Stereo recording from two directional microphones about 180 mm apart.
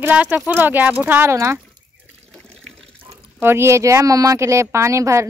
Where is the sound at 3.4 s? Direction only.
15° right (ahead or behind).